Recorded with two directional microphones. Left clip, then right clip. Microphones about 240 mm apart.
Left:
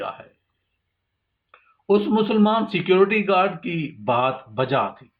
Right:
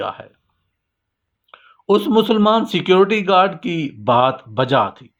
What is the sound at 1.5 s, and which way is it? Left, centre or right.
A man's voice, right.